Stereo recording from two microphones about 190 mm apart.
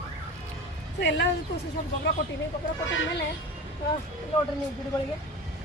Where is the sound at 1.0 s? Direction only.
65° left (ahead or behind).